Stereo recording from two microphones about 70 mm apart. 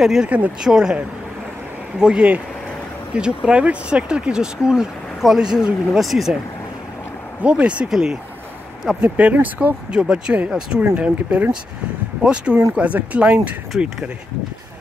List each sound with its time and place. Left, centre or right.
0.0 s speech: centre
7.4 s speech: centre
9.0 s speech: right